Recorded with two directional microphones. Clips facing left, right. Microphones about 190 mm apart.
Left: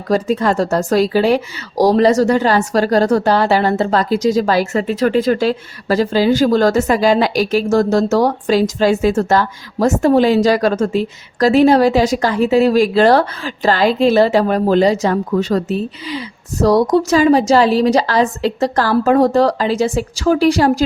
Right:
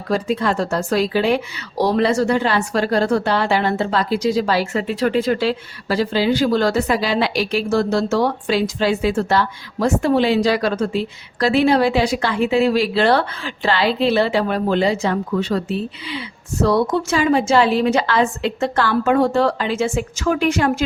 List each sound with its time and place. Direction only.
0.1 s a woman's voice: 40° left (ahead or behind)